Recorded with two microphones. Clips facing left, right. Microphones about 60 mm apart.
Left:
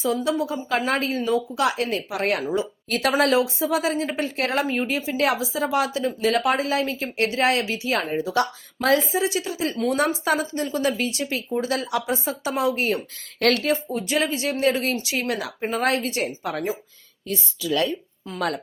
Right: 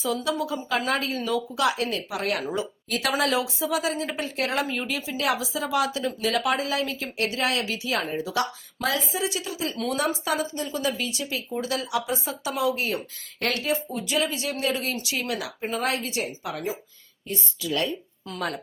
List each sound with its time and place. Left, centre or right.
0.0 s a woman's voice: left
13.4 s a woman's voice: left
13.9 s a woman's voice: left
16.2 s a woman's voice: left
18.3 s a woman's voice: left